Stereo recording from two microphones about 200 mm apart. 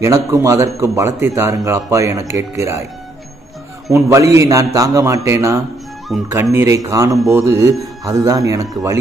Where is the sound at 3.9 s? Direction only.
15° right (ahead or behind).